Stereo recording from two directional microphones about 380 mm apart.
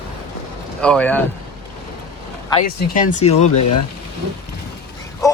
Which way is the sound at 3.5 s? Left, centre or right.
Left.